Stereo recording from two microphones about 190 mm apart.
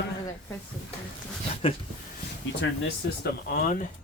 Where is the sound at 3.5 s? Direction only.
45° left (ahead or behind).